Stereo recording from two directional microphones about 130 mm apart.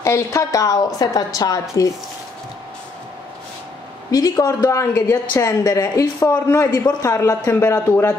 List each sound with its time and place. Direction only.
0.0 s speech: 25° left (ahead or behind)
4.1 s speech: 25° left (ahead or behind)